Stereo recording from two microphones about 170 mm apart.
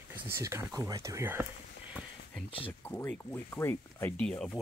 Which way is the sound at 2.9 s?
10° left (ahead or behind).